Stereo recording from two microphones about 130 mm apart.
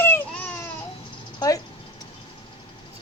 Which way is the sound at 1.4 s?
25° left (ahead or behind).